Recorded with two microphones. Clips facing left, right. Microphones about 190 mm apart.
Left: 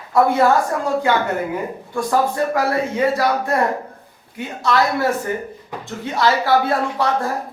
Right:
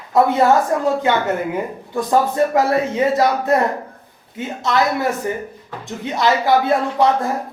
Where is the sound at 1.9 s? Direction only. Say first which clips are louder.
Right 2 dB; 20° right (ahead or behind).